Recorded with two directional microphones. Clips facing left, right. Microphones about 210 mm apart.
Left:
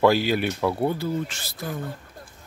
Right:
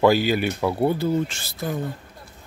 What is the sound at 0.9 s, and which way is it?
Speech, 25° right (ahead or behind).